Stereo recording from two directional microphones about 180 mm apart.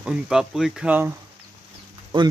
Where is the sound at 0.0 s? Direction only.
5° right (ahead or behind).